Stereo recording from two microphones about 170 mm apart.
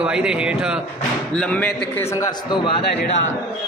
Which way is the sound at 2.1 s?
25° left (ahead or behind).